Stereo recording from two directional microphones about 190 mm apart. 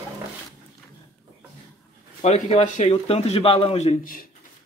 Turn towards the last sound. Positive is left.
turn(degrees=40)  # may be behind; listen again after turning